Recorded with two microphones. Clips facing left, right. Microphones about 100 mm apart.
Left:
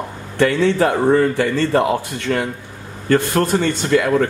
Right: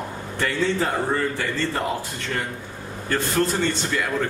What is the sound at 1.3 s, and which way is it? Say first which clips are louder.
Speech: left 9 dB; 70° left (ahead or behind).